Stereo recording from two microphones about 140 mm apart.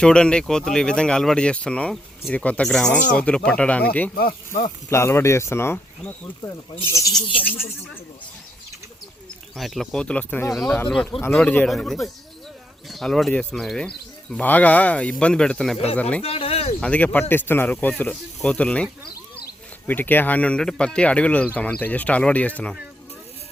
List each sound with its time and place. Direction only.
0.0 s speech: 5° left (ahead or behind)
4.1 s speech: 90° left
4.9 s speech: 20° left (ahead or behind)
9.6 s speech: centre (ahead or behind)
16.2 s speech: 45° left (ahead or behind)
16.8 s speech: 10° left (ahead or behind)
19.9 s speech: 15° left (ahead or behind)